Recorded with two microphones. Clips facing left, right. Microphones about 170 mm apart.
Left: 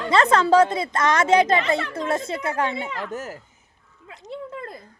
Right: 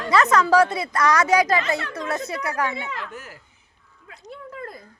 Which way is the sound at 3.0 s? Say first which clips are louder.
Left 5 dB; 45° left (ahead or behind).